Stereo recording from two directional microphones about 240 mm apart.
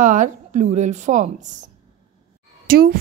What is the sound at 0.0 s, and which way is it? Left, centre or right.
A woman's voice, right.